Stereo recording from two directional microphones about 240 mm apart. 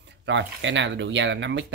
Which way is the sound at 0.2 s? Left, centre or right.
Right.